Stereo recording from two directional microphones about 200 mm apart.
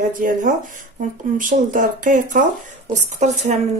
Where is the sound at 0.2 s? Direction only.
45° right (ahead or behind).